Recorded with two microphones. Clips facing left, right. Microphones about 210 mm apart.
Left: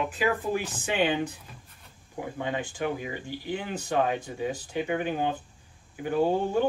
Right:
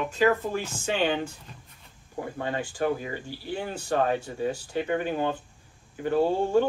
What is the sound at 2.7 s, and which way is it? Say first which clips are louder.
Speech: right 3 dB; 40° right (ahead or behind).